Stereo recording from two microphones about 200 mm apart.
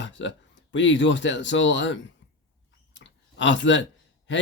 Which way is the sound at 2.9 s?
65° left (ahead or behind).